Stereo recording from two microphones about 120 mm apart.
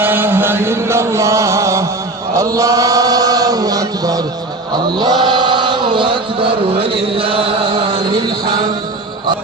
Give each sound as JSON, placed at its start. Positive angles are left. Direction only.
{"t": 0.0, "sound": "chant", "side_deg": -15}